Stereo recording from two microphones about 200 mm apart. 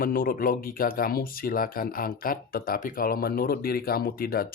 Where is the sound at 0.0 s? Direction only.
45° left (ahead or behind).